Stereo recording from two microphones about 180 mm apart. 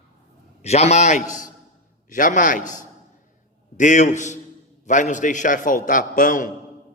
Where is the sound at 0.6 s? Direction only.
35° left (ahead or behind).